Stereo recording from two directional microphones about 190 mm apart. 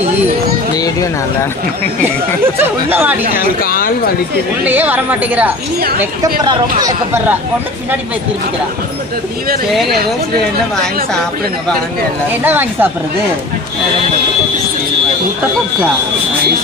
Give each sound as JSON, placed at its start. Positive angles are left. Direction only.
{"t": 2.6, "sound": "a woman's voice", "side_deg": -10}
{"t": 3.3, "sound": "a woman's voice", "side_deg": 50}
{"t": 4.6, "sound": "a woman's voice", "side_deg": -10}
{"t": 6.4, "sound": "speech", "side_deg": -20}
{"t": 12.5, "sound": "a woman's voice", "side_deg": -10}